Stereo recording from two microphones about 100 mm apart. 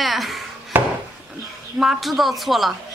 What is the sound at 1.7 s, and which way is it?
Speech, 5° right (ahead or behind).